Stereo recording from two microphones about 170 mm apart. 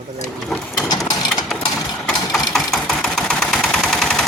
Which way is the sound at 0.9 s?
25° left (ahead or behind).